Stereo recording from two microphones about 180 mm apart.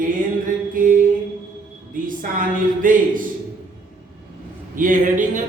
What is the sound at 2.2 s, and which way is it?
Speech, 50° right (ahead or behind).